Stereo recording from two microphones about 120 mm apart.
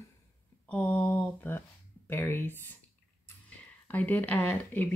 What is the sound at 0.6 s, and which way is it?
Speech, 10° left (ahead or behind).